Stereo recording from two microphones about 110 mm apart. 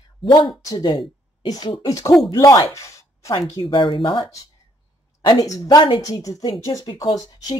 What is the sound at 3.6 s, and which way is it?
Speech, 50° left (ahead or behind).